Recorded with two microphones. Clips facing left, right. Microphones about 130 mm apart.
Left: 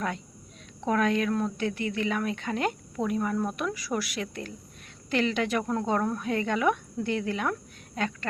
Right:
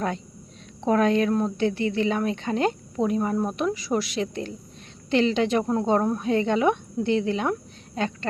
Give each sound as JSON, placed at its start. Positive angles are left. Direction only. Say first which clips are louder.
{"t": 0.8, "sound": "speech", "louder": "right 5 dB", "side_deg": -30}